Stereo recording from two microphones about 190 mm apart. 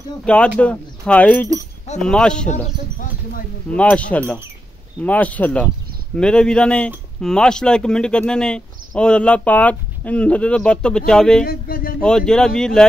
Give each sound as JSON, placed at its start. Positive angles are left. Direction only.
{"t": 0.2, "sound": "speech", "side_deg": 5}
{"t": 2.5, "sound": "speech", "side_deg": 45}
{"t": 3.7, "sound": "speech", "side_deg": 5}
{"t": 11.4, "sound": "speech", "side_deg": 50}
{"t": 12.0, "sound": "speech", "side_deg": 5}